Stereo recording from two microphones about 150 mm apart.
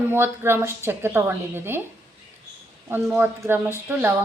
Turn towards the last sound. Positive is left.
turn(degrees=-15)  # may be behind; listen again after turning